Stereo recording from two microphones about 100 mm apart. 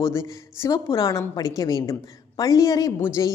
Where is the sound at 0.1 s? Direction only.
30° left (ahead or behind).